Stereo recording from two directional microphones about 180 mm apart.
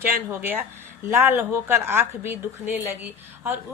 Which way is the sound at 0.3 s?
10° right (ahead or behind).